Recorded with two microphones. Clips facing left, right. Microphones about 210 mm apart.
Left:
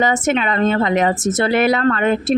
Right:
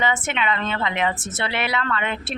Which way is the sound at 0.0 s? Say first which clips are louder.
Left 7 dB; 45° left (ahead or behind).